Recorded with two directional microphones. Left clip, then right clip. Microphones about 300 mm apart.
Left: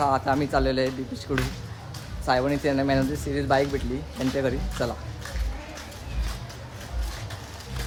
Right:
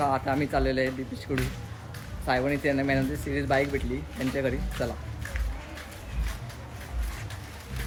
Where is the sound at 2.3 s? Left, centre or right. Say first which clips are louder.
Left 3 dB; centre.